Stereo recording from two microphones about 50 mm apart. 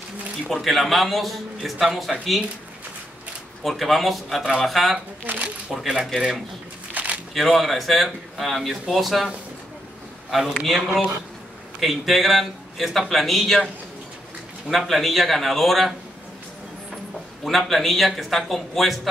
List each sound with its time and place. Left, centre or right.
0.5 s a man's voice: centre
3.6 s a man's voice: centre
5.2 s speech: right
5.7 s speech: centre
6.9 s camera: right
7.3 s a man's voice: centre
10.3 s a man's voice: centre
14.7 s a man's voice: centre
17.5 s a man's voice: centre